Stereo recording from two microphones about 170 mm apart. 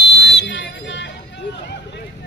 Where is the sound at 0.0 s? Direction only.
90° left.